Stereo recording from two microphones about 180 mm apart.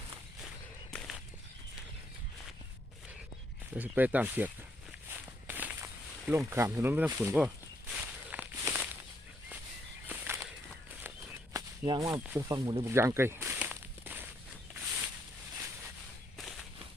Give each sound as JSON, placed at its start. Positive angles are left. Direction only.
{"t": 0.4, "sound": "walk", "side_deg": 5}
{"t": 3.8, "sound": "speech", "side_deg": -10}
{"t": 5.5, "sound": "a sound", "side_deg": -10}
{"t": 6.5, "sound": "speech", "side_deg": -15}
{"t": 7.9, "sound": "walk", "side_deg": -10}
{"t": 10.1, "sound": "walk", "side_deg": -15}
{"t": 11.5, "sound": "whip", "side_deg": -20}
{"t": 12.1, "sound": "speech", "side_deg": -5}
{"t": 12.4, "sound": "walk", "side_deg": -20}
{"t": 14.7, "sound": "a sound", "side_deg": -5}
{"t": 16.4, "sound": "whip", "side_deg": 0}